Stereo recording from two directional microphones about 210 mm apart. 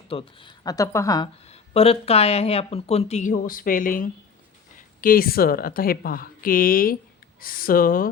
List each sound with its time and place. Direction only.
0.1 s speech: 25° left (ahead or behind)
1.7 s speech: 30° left (ahead or behind)